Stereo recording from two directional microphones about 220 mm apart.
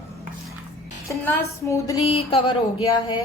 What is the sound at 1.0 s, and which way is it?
Speech, 15° left (ahead or behind).